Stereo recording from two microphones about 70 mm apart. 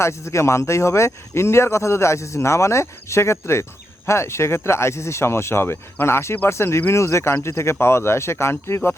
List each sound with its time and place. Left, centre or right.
0.0 s speech: left